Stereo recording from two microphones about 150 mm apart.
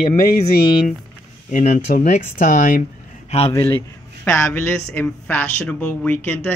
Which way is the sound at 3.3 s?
45° left (ahead or behind).